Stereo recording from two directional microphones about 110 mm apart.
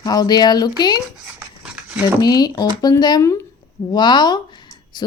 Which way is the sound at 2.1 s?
35° left (ahead or behind).